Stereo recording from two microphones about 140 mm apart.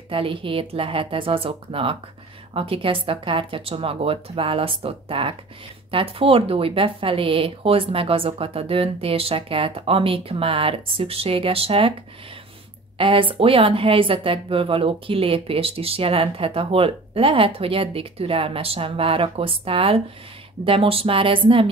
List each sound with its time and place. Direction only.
0.1 s speech: 40° right (ahead or behind)
12.9 s speech: 40° right (ahead or behind)